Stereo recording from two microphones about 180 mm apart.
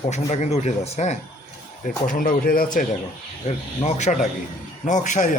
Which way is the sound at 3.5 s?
35° left (ahead or behind).